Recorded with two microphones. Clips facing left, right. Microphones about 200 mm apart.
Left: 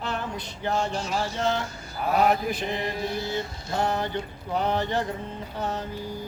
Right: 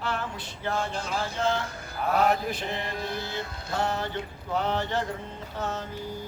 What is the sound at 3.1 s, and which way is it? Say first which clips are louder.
Music: left 4 dB; 55° right (ahead or behind).